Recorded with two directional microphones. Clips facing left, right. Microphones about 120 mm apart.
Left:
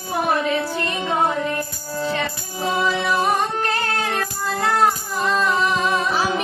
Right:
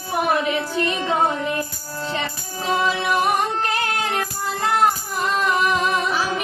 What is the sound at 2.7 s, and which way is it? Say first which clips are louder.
Music: right 1 dB; 20° right (ahead or behind).